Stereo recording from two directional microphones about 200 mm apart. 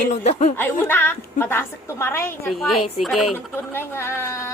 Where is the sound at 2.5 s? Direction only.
Centre (ahead or behind).